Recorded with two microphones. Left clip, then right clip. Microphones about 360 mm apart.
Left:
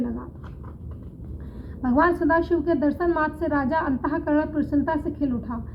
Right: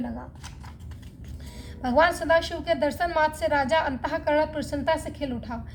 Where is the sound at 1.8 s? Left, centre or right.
Right.